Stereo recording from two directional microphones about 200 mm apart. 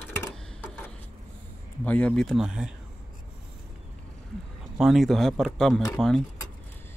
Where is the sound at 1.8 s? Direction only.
5° left (ahead or behind).